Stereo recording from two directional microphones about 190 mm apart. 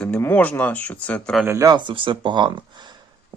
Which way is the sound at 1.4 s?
15° right (ahead or behind).